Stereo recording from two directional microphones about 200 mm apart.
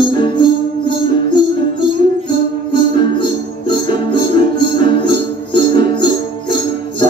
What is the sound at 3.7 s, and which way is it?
Music, 20° left (ahead or behind).